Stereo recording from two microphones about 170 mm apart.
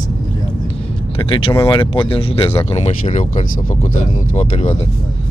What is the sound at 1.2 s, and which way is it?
Speech, 30° left (ahead or behind).